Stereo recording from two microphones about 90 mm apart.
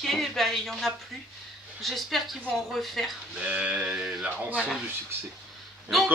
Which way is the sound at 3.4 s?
15° right (ahead or behind).